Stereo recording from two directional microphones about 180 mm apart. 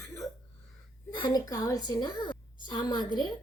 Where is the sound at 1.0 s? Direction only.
20° left (ahead or behind).